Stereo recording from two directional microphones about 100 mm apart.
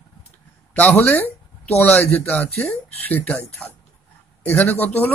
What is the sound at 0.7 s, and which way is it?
Speech, 15° left (ahead or behind).